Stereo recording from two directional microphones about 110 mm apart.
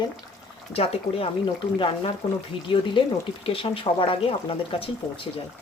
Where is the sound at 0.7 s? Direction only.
65° left (ahead or behind).